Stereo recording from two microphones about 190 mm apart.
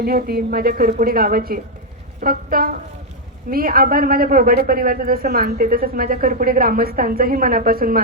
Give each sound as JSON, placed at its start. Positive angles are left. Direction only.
{"t": 0.0, "sound": "a man's voice", "side_deg": -50}